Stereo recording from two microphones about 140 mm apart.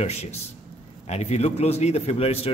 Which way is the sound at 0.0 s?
50° left (ahead or behind).